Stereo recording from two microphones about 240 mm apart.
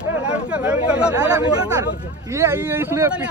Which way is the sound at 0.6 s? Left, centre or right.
Centre.